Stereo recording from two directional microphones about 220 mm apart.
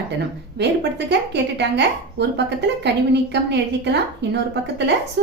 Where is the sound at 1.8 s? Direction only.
50° right (ahead or behind).